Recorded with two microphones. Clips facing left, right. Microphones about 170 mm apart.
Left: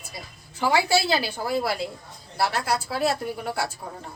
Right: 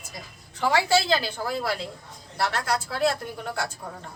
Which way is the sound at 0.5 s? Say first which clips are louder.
Even; 10° left (ahead or behind).